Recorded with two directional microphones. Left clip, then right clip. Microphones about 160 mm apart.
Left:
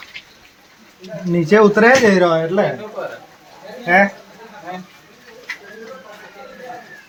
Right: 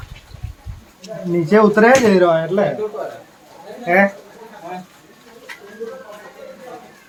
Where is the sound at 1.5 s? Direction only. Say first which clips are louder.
Left 1 dB; 40° left (ahead or behind).